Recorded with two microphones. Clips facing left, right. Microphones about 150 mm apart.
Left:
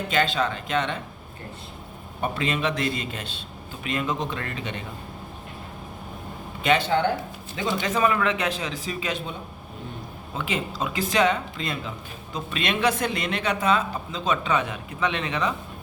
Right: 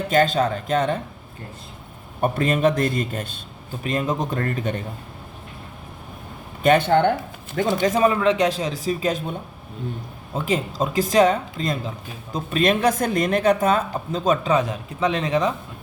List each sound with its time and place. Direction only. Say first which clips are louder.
0.1 s speech: right 6 dB; 45° right (ahead or behind)
2.2 s a man's voice: right 7 dB; 50° right (ahead or behind)
6.6 s speech: right 5 dB; 50° right (ahead or behind)
10.3 s speech: right 5 dB; 40° right (ahead or behind)